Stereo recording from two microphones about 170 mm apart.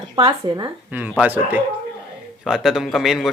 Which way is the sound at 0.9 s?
10° right (ahead or behind).